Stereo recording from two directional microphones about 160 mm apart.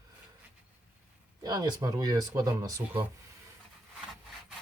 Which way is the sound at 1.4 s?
25° right (ahead or behind).